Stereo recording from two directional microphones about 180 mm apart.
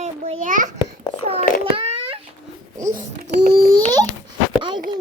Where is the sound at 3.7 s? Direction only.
20° right (ahead or behind).